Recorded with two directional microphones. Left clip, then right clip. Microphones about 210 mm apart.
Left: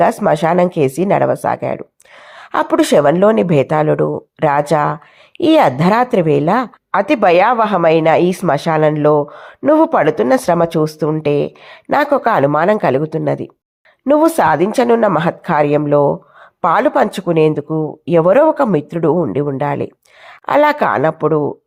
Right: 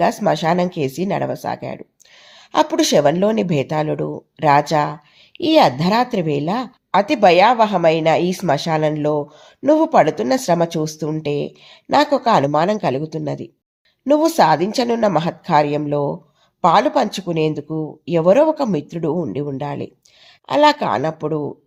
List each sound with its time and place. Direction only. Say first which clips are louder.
0.0 s speech: left 4 dB; 25° left (ahead or behind)
17.7 s speech: left 6 dB; 40° left (ahead or behind)
18.1 s speech: left 3 dB; 20° left (ahead or behind)